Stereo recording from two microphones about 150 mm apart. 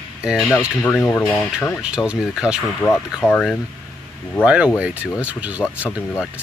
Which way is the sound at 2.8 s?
15° left (ahead or behind).